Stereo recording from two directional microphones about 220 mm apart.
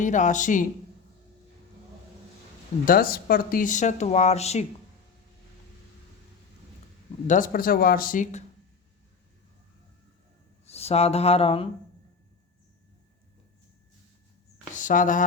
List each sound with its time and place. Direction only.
0.0 s speech: 35° left (ahead or behind)
2.8 s speech: 40° left (ahead or behind)
7.3 s speech: 40° left (ahead or behind)
10.7 s speech: 30° left (ahead or behind)
14.8 s speech: 35° left (ahead or behind)